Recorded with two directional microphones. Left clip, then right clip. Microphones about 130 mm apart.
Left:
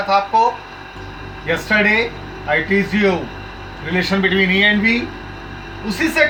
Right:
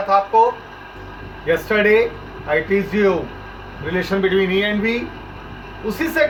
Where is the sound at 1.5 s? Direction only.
25° right (ahead or behind).